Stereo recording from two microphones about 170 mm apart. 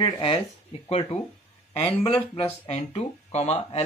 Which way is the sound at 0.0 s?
30° left (ahead or behind).